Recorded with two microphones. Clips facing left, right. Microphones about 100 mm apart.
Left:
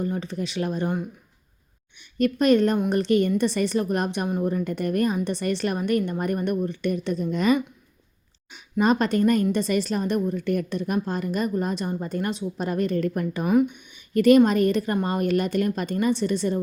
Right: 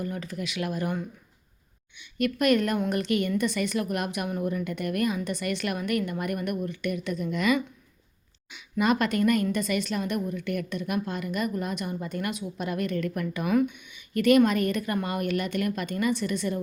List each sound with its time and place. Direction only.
0.0 s a woman's voice: 25° left (ahead or behind)
13.5 s speech: 20° left (ahead or behind)
13.7 s a woman's voice: 35° left (ahead or behind)